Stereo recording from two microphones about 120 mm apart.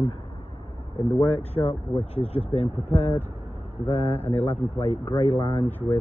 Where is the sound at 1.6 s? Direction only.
40° left (ahead or behind).